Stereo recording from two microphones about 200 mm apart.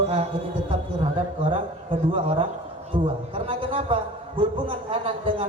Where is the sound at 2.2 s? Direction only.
25° right (ahead or behind).